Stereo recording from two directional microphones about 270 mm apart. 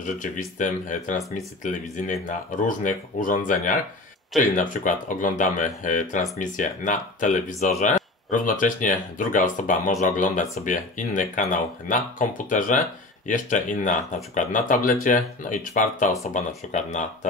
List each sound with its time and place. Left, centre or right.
0.0 s speech: left